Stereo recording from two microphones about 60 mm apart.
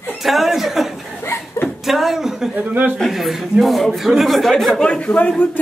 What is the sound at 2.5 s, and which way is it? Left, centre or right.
Speech, right.